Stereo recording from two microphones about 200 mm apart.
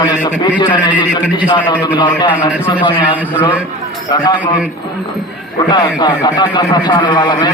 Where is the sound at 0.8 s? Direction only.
10° right (ahead or behind).